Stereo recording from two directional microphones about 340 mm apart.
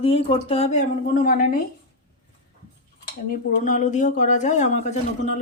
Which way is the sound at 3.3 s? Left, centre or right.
Left.